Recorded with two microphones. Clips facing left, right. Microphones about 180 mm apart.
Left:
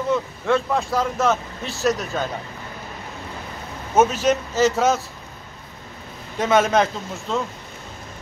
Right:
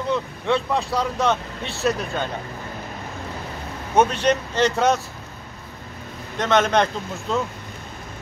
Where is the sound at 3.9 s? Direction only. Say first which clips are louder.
Left 1 dB; 5° left (ahead or behind).